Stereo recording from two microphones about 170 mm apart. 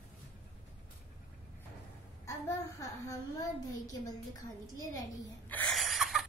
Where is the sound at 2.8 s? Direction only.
20° left (ahead or behind).